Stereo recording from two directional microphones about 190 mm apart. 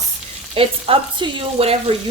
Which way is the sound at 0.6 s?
30° right (ahead or behind).